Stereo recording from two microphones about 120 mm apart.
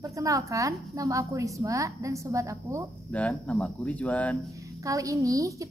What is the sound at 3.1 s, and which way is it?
Speech, 10° left (ahead or behind).